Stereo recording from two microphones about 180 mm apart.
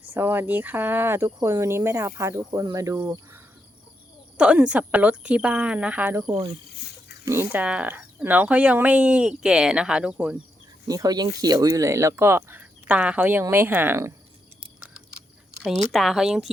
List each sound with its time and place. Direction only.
0.1 s speech: 10° right (ahead or behind)
7.3 s speech: 10° right (ahead or behind)
10.8 s speech: 20° right (ahead or behind)
15.6 s speech: centre (ahead or behind)